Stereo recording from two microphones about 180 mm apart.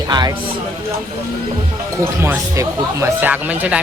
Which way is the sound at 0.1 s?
25° right (ahead or behind).